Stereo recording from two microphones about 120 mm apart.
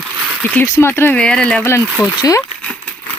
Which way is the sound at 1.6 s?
20° left (ahead or behind).